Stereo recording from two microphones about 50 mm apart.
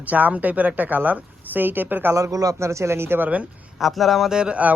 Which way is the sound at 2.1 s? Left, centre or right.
Right.